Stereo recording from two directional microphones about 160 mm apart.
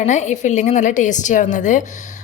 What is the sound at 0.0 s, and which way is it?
Speech, 45° left (ahead or behind).